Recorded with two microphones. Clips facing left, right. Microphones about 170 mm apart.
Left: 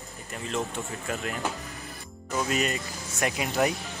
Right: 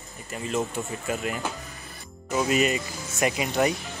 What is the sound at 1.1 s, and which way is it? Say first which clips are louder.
Speech: right 1 dB; 5° right (ahead or behind).